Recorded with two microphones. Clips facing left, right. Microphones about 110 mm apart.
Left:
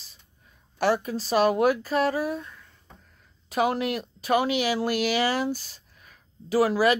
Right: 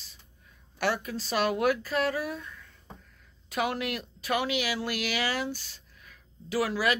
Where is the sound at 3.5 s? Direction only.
35° left (ahead or behind).